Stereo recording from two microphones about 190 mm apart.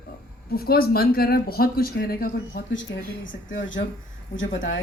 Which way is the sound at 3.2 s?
85° left.